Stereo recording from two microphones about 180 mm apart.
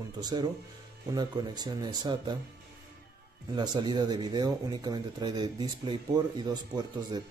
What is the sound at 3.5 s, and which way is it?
Speech, 25° right (ahead or behind).